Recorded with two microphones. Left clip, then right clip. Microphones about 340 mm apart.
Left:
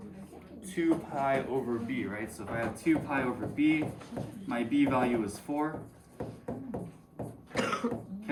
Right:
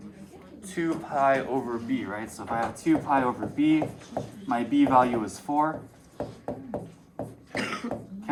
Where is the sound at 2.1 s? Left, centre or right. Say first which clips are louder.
Right 6 dB; centre.